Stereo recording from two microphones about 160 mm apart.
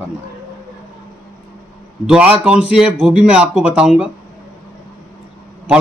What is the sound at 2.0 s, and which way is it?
Speech, 5° right (ahead or behind).